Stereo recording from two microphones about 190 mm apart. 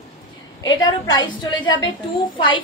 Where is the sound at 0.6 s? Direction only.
25° left (ahead or behind).